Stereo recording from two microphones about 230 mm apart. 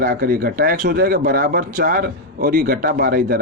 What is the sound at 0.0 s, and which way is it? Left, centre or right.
Speech, right.